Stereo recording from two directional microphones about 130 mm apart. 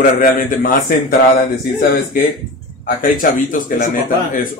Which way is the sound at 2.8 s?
90° left.